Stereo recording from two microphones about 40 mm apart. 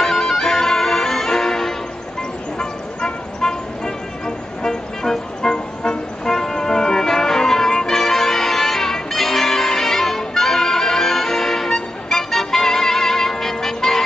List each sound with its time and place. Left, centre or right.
0.0 s music: centre
2.6 s vehicle: centre
4.6 s music: centre